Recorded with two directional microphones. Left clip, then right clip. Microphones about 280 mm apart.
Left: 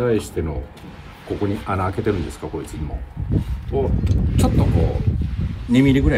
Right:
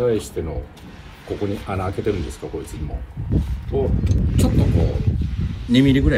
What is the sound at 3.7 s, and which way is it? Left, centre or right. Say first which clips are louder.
Speech: even; centre.